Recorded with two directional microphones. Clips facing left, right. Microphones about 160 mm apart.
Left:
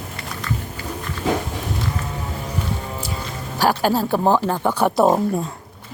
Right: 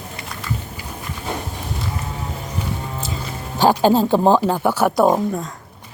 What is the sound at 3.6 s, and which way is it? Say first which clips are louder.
Speech: right 4 dB; 20° right (ahead or behind).